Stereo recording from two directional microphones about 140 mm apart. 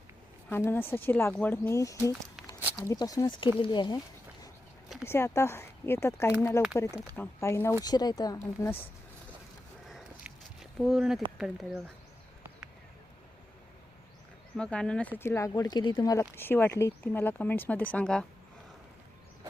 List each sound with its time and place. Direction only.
0.5 s speech: 15° left (ahead or behind); by 4.0 s 30° left (ahead or behind)
5.0 s speech: 20° left (ahead or behind)
7.9 s speech: 30° left (ahead or behind)
9.8 s walk: centre (ahead or behind)
11.3 s speech: 5° right (ahead or behind)
14.5 s speech: 5° left (ahead or behind)
15.2 s speech: 20° left (ahead or behind)
16.3 s speech: 15° left (ahead or behind)